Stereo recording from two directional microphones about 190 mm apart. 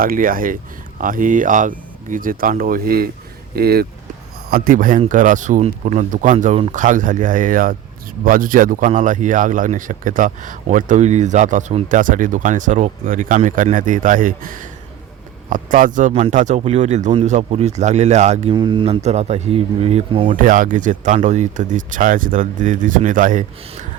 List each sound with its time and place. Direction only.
0.0 s speech: 50° right (ahead or behind)
18.5 s speech: 25° right (ahead or behind)
20.3 s speech: 45° right (ahead or behind)